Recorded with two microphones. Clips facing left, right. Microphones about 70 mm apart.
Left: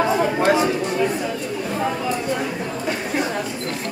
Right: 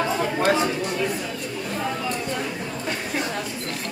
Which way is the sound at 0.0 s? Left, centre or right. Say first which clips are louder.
Left 4 dB; centre.